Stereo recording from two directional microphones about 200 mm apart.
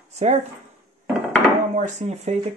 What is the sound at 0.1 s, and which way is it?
Speech, 35° right (ahead or behind).